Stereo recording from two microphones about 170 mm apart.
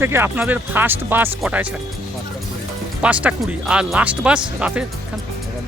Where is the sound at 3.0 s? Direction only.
10° right (ahead or behind).